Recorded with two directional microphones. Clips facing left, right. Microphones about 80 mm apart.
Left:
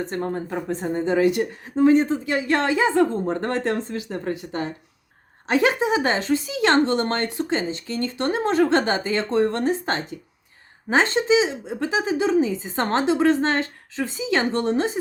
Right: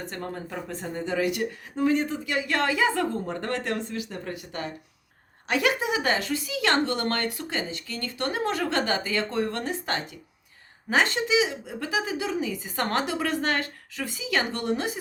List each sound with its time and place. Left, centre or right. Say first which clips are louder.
0.0 s speech: left 8 dB; left